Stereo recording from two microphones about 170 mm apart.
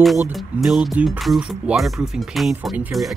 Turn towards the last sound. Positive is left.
turn(degrees=-5)  # may be behind; listen again after turning